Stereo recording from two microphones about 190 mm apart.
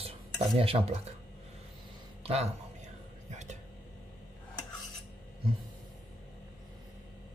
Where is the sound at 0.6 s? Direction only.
30° right (ahead or behind).